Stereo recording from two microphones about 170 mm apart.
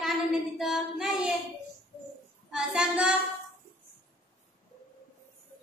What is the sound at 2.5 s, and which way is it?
Child singing, 5° right (ahead or behind).